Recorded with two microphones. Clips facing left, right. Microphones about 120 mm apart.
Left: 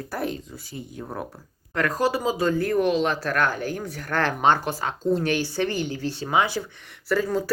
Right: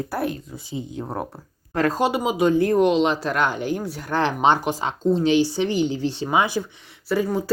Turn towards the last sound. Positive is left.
turn(degrees=-15)  # may be behind; listen again after turning